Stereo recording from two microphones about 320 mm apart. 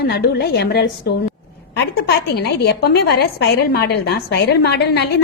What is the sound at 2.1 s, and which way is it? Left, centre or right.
A woman's voice, left.